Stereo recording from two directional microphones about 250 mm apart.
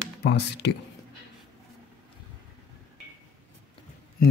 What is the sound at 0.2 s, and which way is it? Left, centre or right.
Speech, left.